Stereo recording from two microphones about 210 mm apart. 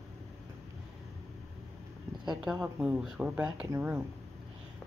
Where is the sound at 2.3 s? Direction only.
5° right (ahead or behind).